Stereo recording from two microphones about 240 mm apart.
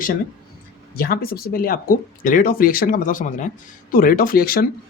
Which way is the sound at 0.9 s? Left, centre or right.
Left.